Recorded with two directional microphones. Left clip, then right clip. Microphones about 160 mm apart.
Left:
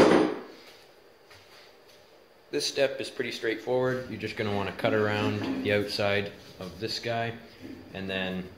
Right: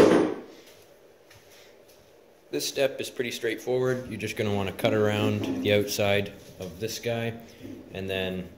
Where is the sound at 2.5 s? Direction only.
45° right (ahead or behind); by 8.3 s 70° right (ahead or behind).